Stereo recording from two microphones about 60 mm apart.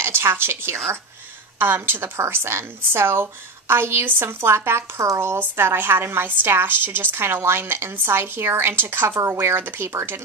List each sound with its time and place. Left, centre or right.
0.0 s a woman's voice: right
5.4 s a woman's voice: right